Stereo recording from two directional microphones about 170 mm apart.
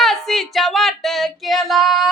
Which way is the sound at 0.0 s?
Centre (ahead or behind).